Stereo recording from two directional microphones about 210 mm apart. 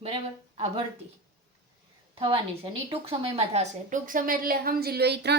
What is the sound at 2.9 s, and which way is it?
A woman's voice, 30° right (ahead or behind).